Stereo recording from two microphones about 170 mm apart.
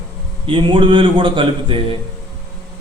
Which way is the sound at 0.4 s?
30° right (ahead or behind).